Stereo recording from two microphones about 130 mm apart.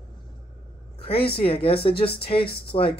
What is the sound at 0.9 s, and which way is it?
Speech, 45° left (ahead or behind).